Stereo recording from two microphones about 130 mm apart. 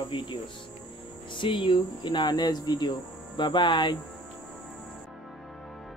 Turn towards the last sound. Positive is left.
turn(degrees=35)  # may be behind; listen again after turning